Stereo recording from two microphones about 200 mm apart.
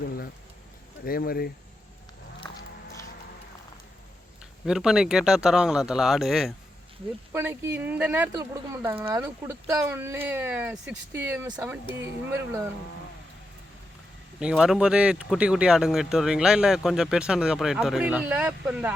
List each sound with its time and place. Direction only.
1.0 s speech: 45° left (ahead or behind)
2.4 s a sound: 15° left (ahead or behind)
4.6 s speech: 5° right (ahead or behind)
14.3 s speech: 5° right (ahead or behind)